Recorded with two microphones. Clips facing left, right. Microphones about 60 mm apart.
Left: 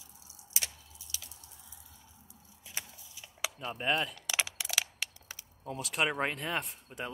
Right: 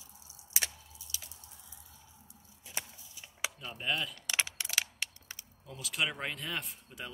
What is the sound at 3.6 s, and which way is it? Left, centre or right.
Speech, left.